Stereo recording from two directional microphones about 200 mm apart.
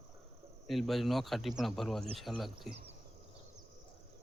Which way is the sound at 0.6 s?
Centre (ahead or behind).